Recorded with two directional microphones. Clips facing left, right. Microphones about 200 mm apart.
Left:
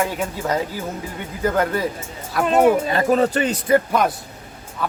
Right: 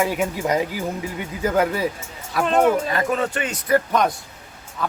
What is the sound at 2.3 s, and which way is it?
Speech, 5° left (ahead or behind).